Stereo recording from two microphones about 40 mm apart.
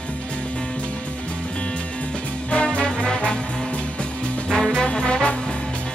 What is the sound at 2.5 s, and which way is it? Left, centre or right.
Music, left.